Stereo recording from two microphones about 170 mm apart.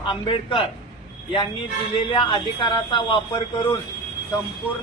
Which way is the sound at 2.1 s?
30° left (ahead or behind).